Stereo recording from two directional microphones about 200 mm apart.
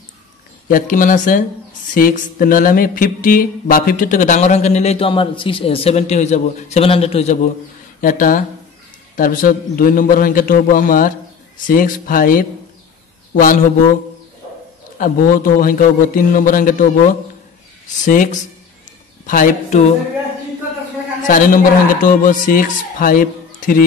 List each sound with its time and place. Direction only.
0.7 s mantra: 45° left (ahead or behind)
8.0 s a man's voice: 45° left (ahead or behind)
15.0 s a man's voice: 45° left (ahead or behind)
17.8 s mantra: 40° left (ahead or behind)
21.2 s a man's voice: 45° left (ahead or behind)